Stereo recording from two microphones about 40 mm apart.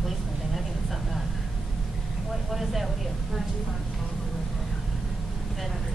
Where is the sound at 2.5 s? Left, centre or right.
Centre.